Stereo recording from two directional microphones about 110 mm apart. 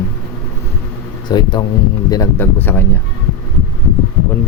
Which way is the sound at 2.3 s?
20° left (ahead or behind).